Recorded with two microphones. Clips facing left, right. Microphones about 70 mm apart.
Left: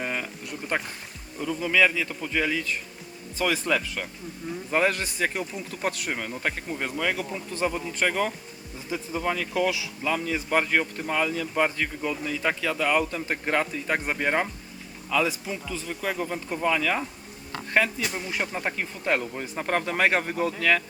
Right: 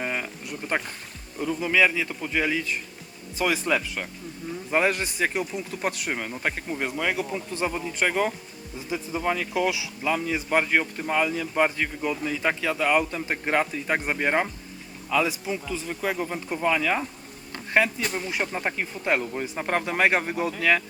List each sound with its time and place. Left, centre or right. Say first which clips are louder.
0.0 s a sound: right 1 dB; centre
1.4 s a man's voice: right 1 dB; centre
18.3 s a man's voice: right 1 dB; centre